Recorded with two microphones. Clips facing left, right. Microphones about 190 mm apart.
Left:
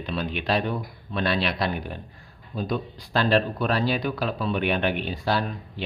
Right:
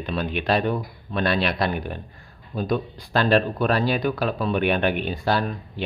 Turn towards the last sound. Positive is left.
turn(degrees=-50)  # may be behind; listen again after turning